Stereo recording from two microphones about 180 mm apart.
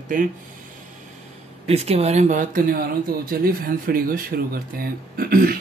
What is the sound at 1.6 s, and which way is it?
Speech, 35° right (ahead or behind).